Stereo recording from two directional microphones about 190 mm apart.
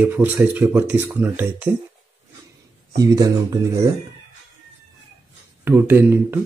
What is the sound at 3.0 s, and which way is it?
Speech, 20° right (ahead or behind).